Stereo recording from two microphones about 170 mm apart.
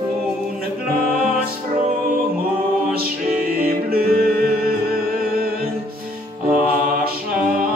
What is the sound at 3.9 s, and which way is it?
Music, 60° right (ahead or behind).